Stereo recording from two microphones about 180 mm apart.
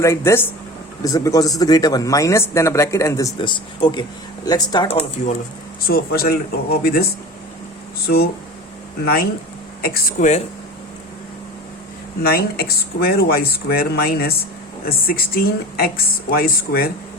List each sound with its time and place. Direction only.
0.0 s speech: 15° left (ahead or behind); by 5.4 s 35° left (ahead or behind)
5.8 s speech: 55° left (ahead or behind)
12.2 s speech: 55° left (ahead or behind)